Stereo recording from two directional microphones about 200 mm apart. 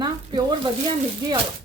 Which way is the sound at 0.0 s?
20° right (ahead or behind).